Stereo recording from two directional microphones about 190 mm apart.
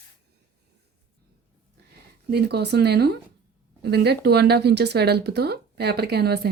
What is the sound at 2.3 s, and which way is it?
Speech, 60° right (ahead or behind).